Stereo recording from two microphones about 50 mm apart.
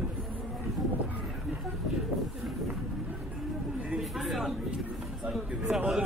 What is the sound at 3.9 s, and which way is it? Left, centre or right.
Speech, centre.